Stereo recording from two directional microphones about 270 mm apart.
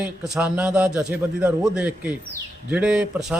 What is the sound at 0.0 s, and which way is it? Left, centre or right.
Speech, centre.